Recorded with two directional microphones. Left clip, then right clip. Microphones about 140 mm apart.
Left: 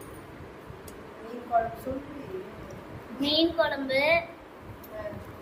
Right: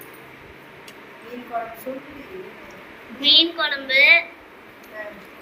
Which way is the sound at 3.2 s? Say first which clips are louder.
Right 8 dB; 85° left.